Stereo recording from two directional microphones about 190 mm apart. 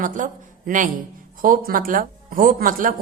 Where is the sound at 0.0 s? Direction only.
45° right (ahead or behind).